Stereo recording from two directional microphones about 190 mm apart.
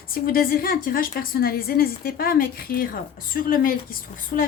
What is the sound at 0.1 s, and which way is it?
A woman's voice, 50° left (ahead or behind).